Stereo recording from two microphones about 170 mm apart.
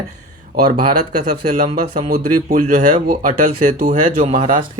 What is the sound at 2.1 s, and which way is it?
Speech, 50° right (ahead or behind).